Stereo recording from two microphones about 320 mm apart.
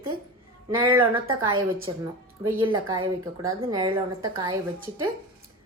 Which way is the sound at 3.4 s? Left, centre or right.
Centre.